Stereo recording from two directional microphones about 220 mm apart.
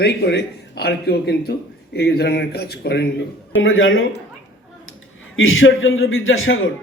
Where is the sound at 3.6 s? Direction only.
65° left (ahead or behind).